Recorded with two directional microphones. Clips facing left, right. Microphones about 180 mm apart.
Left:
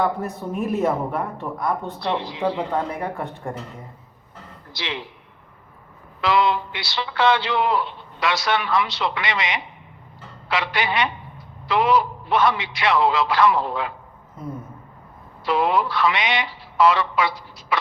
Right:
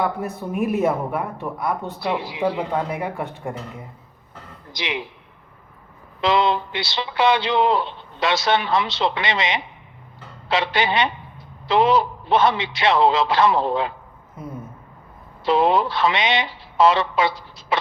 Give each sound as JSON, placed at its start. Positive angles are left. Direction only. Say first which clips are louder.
{"t": 0.0, "sound": "speech", "louder": "left 1 dB", "side_deg": -5}
{"t": 0.5, "sound": "speech", "louder": "right 3 dB", "side_deg": -15}
{"t": 0.8, "sound": "speech", "louder": "right 1 dB", "side_deg": -5}
{"t": 4.7, "sound": "speech", "louder": "right 3 dB", "side_deg": -15}
{"t": 6.2, "sound": "speech", "louder": "right 1 dB", "side_deg": -25}
{"t": 15.4, "sound": "speech", "louder": "right 3 dB", "side_deg": -25}